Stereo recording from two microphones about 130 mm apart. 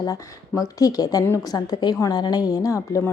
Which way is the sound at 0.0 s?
25° left (ahead or behind).